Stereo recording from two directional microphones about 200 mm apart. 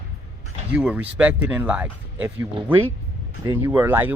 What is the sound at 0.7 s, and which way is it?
Speech, 5° right (ahead or behind).